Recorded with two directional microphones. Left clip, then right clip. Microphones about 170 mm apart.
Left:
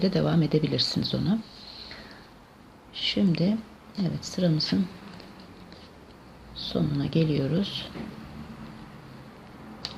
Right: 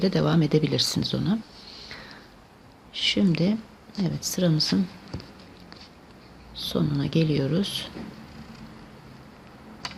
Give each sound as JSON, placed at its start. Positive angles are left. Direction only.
{"t": 0.0, "sound": "speech", "side_deg": -25}
{"t": 6.6, "sound": "speech", "side_deg": -25}